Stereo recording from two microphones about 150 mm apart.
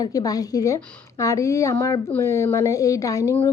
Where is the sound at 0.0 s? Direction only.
25° left (ahead or behind).